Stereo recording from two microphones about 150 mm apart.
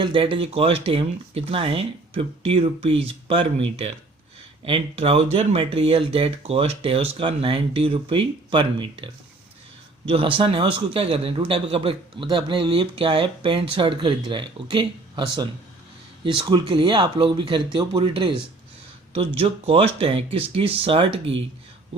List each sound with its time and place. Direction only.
0.0 s speech: 35° right (ahead or behind)
10.1 s speech: 35° right (ahead or behind)